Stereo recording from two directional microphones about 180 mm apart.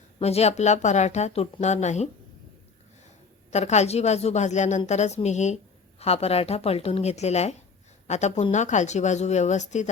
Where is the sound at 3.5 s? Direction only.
40° left (ahead or behind).